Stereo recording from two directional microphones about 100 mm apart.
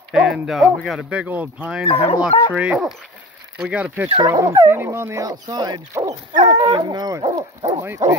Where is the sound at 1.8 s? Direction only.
90° left.